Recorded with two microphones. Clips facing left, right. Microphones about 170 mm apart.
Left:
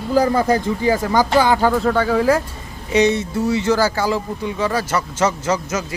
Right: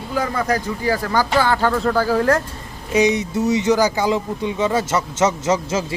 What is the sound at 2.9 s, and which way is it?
Speech, 10° right (ahead or behind).